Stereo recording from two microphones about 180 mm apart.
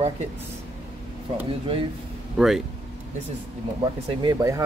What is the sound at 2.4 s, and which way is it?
Speech, centre (ahead or behind).